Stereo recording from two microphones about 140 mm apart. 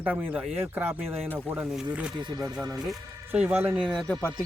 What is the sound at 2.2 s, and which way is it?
Speech, 25° right (ahead or behind).